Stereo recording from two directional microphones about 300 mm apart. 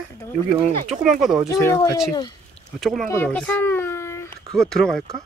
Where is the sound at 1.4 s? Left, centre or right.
Centre.